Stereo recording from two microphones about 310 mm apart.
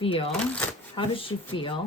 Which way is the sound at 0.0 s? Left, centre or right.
Centre.